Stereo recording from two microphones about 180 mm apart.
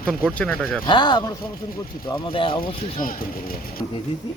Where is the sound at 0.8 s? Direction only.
25° left (ahead or behind).